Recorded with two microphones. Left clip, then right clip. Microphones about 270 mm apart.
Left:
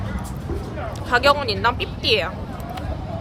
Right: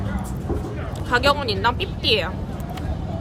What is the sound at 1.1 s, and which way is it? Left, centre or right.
Speech, centre.